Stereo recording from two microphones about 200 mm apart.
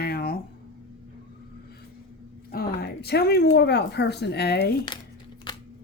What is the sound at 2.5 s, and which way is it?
Speech, 50° left (ahead or behind).